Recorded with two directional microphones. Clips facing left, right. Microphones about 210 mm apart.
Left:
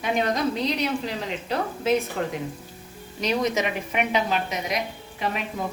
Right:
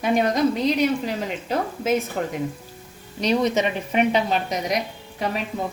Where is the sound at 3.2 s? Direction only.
30° right (ahead or behind).